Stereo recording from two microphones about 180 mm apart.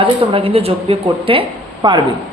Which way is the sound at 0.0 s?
30° right (ahead or behind).